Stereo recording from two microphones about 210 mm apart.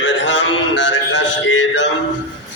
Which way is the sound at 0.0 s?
60° left (ahead or behind).